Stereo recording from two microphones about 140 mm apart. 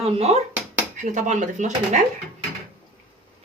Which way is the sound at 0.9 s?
60° right (ahead or behind).